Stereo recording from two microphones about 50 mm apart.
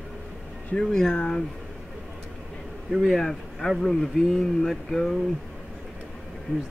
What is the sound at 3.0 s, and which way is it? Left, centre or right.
Speech, centre.